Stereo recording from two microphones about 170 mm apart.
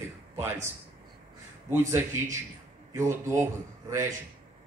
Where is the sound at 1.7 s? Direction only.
15° right (ahead or behind).